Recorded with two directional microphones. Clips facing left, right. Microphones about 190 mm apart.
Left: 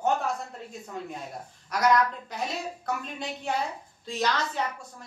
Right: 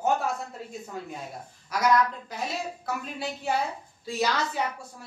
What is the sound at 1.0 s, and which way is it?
A woman's voice, 5° right (ahead or behind).